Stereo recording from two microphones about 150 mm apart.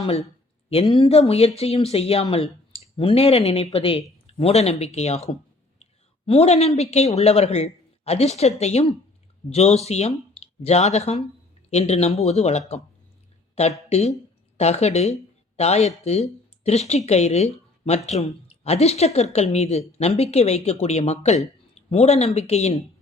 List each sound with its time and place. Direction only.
0.0 s a woman's voice: 40° left (ahead or behind)